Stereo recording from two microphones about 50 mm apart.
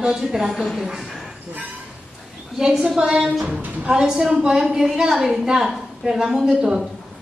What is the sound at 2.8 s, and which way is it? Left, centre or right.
A woman's voice, centre.